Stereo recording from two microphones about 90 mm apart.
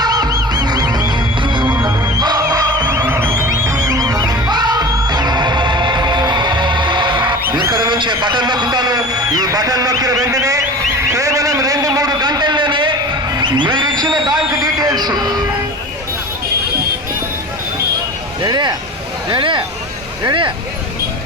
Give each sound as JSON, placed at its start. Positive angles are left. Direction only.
{"t": 0.0, "sound": "music", "side_deg": -45}
{"t": 1.6, "sound": "music", "side_deg": -20}
{"t": 2.2, "sound": "music", "side_deg": -50}
{"t": 3.1, "sound": "music", "side_deg": -25}
{"t": 3.6, "sound": "music", "side_deg": -35}
{"t": 7.6, "sound": "a sound", "side_deg": -30}
{"t": 7.9, "sound": "a sound", "side_deg": -60}
{"t": 18.4, "sound": "speech", "side_deg": -50}
{"t": 19.3, "sound": "speech", "side_deg": -60}